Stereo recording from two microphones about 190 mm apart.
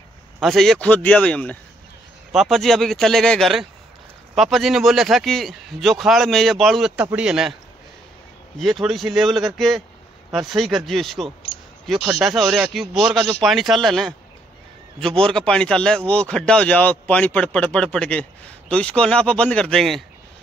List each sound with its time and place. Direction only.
0.4 s a man's voice: centre (ahead or behind)
8.5 s a man's voice: centre (ahead or behind)
11.5 s a sound: 30° left (ahead or behind)
11.8 s a man's voice: centre (ahead or behind)